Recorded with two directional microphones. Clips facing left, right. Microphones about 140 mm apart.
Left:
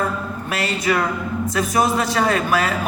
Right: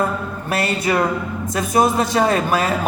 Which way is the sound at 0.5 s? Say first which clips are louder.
Right 2 dB; 30° right (ahead or behind).